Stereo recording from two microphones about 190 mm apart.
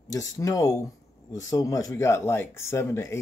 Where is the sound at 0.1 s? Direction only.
15° left (ahead or behind).